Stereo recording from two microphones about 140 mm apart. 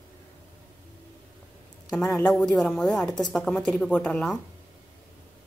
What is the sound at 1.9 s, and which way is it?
Speech, 5° left (ahead or behind).